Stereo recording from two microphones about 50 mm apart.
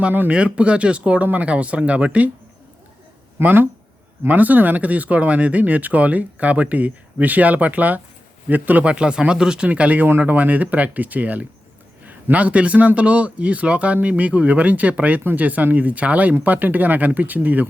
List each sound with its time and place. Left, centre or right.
0.3 s speech: right
3.4 s speech: right
8.8 s speech: right
9.6 s speech: right